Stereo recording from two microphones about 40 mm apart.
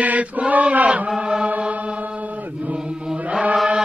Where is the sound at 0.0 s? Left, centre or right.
Right.